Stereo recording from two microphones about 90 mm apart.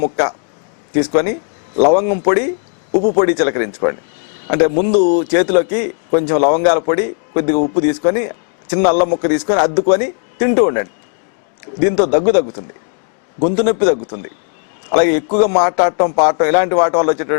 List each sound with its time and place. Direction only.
0.0 s a man's voice: 20° left (ahead or behind)